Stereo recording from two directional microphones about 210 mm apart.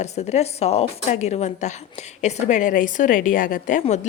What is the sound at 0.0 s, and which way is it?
A woman's voice, 30° left (ahead or behind).